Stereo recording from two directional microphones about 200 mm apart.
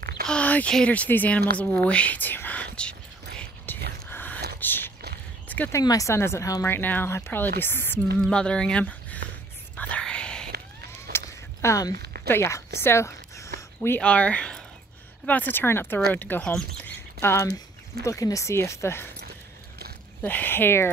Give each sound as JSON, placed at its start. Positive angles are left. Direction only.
{"t": 0.3, "sound": "speech", "side_deg": 5}
{"t": 3.3, "sound": "mechanisms", "side_deg": 10}
{"t": 4.1, "sound": "a sound", "side_deg": 10}
{"t": 5.5, "sound": "speech", "side_deg": 10}
{"t": 9.8, "sound": "whispering", "side_deg": 5}
{"t": 11.1, "sound": "a sound", "side_deg": 15}
{"t": 11.9, "sound": "a sound", "side_deg": -50}
{"t": 12.3, "sound": "speech", "side_deg": 15}
{"t": 20.2, "sound": "speech", "side_deg": 10}